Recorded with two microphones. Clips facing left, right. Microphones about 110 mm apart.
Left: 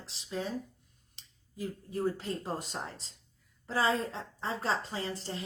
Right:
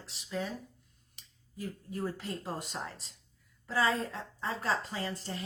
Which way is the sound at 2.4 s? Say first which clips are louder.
Left 1 dB; 25° left (ahead or behind).